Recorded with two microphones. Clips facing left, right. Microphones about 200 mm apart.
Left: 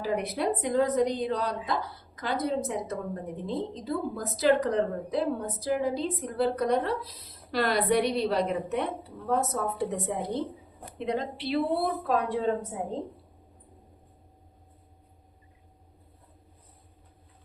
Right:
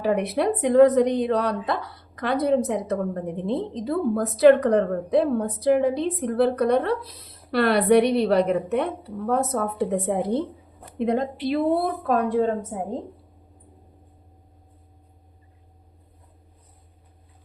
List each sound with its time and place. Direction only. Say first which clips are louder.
0.0 s a woman's voice: right 6 dB; 65° right (ahead or behind)